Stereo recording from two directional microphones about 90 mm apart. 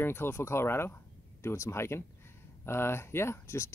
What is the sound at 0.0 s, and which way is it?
Speech, 25° left (ahead or behind).